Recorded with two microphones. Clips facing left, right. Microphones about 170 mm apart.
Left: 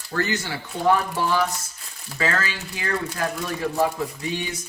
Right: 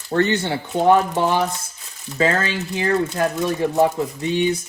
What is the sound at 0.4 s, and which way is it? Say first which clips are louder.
Speech: right 5 dB; 25° right (ahead or behind).